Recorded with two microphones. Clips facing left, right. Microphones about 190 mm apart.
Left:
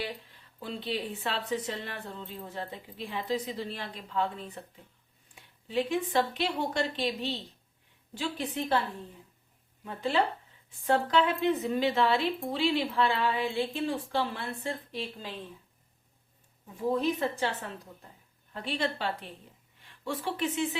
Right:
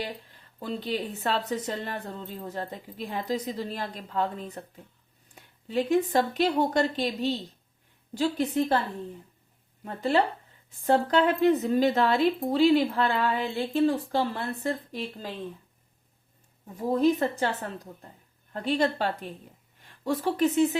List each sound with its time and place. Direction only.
0.6 s a woman's voice: 40° right (ahead or behind)
9.8 s a woman's voice: 40° right (ahead or behind)
16.9 s a woman's voice: 40° right (ahead or behind)